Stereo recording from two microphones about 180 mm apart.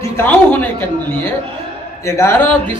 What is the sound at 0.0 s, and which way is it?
Speech, 10° left (ahead or behind).